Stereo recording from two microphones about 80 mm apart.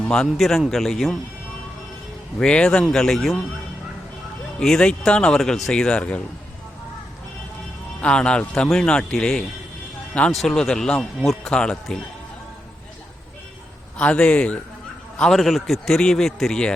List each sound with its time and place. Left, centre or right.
0.0 s a man's voice: centre
2.4 s a man's voice: centre
4.6 s speech: centre
8.0 s a man's voice: centre
11.5 s speech: centre
14.0 s speech: centre
15.2 s a man's voice: centre